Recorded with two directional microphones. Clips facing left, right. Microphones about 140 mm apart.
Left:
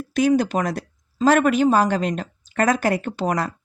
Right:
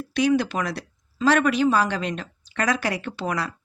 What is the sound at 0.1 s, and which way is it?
Speech, 45° left (ahead or behind).